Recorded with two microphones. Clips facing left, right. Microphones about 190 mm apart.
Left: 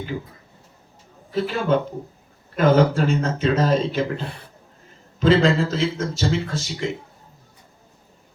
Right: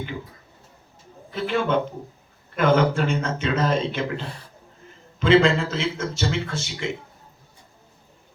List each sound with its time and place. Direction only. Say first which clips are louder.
1.3 s a man's voice: left 2 dB; 40° left (ahead or behind)
5.2 s a man's voice: left 1 dB; 40° left (ahead or behind)